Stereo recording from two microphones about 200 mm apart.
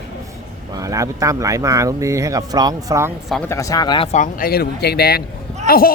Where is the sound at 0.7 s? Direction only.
15° right (ahead or behind).